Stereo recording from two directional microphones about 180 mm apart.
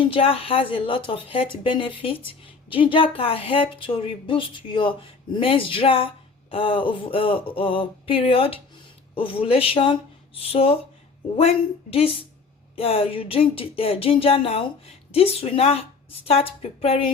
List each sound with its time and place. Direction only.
0.0 s speech: 30° left (ahead or behind)